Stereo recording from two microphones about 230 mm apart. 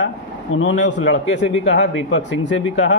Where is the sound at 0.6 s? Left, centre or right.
Left.